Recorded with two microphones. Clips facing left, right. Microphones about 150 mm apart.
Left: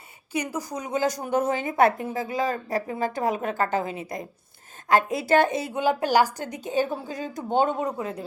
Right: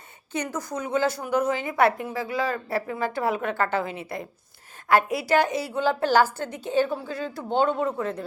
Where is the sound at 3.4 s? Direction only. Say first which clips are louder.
Even; 40° left (ahead or behind).